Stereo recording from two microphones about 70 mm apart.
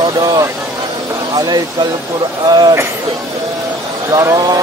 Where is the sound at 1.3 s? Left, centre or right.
Right.